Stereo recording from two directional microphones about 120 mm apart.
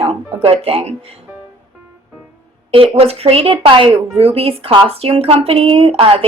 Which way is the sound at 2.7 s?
55° right (ahead or behind).